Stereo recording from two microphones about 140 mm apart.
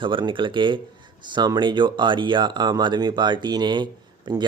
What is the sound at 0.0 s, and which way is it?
Speech, 35° right (ahead or behind).